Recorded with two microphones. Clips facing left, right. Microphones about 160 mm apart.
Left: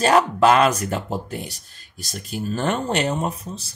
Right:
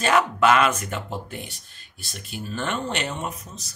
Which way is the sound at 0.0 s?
35° left (ahead or behind).